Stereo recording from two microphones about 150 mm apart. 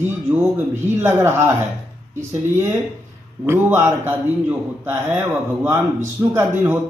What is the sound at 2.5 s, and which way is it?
Speech, 15° right (ahead or behind).